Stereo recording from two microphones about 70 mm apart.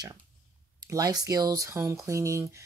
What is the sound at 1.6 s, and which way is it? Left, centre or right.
Speech, right.